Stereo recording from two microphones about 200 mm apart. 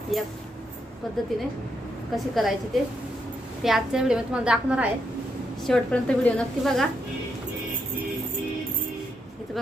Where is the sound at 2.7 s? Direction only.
Centre (ahead or behind).